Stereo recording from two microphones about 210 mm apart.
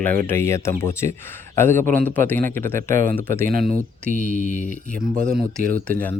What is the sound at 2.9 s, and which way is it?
Speech, 35° right (ahead or behind).